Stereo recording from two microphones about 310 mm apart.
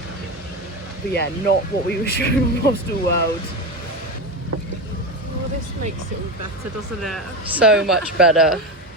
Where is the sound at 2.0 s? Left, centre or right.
Left.